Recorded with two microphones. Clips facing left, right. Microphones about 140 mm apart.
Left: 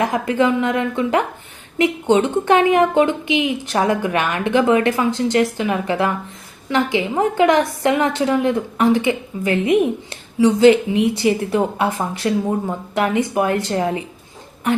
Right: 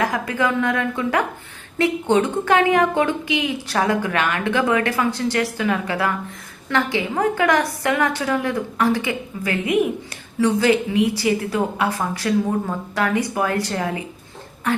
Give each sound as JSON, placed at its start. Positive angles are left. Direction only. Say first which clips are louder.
{"t": 0.0, "sound": "a woman's voice", "louder": "left 4 dB", "side_deg": 20}